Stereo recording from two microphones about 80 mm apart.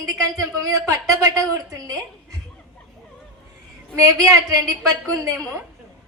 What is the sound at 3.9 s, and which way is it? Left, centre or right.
A woman's voice, right.